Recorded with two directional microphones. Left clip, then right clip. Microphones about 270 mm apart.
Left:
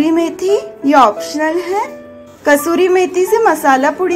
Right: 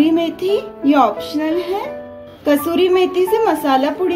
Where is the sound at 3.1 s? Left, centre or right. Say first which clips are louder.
Left 4 dB; centre.